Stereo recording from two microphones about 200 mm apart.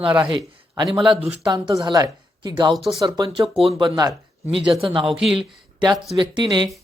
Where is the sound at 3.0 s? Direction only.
20° right (ahead or behind).